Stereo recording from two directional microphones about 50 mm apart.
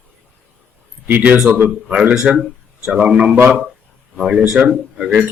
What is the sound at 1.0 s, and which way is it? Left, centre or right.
Speech, right.